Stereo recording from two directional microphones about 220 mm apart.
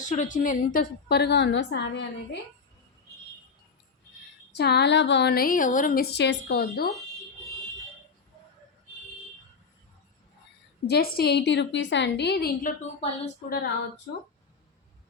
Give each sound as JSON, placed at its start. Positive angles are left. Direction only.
{"t": 0.0, "sound": "speech", "side_deg": 35}
{"t": 4.5, "sound": "speech", "side_deg": 50}
{"t": 10.8, "sound": "speech", "side_deg": 45}